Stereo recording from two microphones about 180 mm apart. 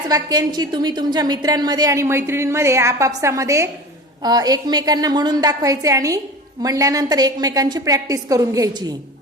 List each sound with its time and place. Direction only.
0.1 s a woman's voice: 20° right (ahead or behind)